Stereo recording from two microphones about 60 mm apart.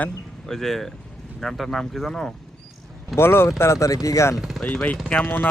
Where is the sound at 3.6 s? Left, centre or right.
Left.